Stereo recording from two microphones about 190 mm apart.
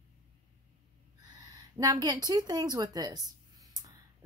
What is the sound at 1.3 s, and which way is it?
Speech, 20° right (ahead or behind).